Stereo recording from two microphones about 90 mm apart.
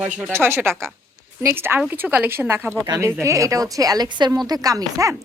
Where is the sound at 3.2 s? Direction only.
40° right (ahead or behind).